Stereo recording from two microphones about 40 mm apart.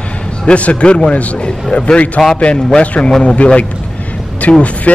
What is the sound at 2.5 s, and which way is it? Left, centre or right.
Speech, centre.